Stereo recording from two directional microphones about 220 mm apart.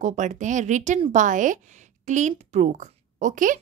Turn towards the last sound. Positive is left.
turn(degrees=-35)  # may be behind; listen again after turning